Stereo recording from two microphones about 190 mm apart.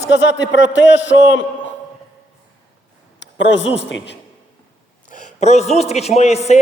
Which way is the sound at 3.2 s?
70° left (ahead or behind).